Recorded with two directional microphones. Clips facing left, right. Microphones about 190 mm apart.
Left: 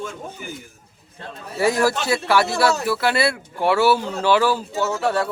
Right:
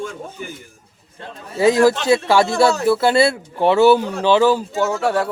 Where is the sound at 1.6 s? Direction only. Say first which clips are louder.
Right 5 dB; 20° right (ahead or behind).